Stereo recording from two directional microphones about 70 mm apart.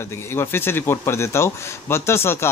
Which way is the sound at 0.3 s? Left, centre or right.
Left.